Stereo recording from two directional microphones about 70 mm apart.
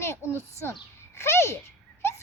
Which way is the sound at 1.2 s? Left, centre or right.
Left.